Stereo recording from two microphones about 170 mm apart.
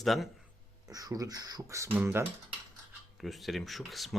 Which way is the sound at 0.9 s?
20° right (ahead or behind).